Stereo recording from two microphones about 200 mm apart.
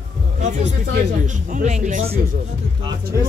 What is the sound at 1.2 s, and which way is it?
A man's voice, 40° right (ahead or behind).